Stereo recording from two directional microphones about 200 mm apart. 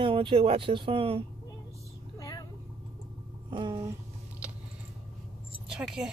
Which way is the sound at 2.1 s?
20° left (ahead or behind).